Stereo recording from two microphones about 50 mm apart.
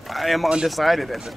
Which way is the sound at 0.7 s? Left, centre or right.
Centre.